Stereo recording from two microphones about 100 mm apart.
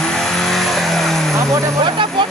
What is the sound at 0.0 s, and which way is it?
Vehicle, 5° left (ahead or behind).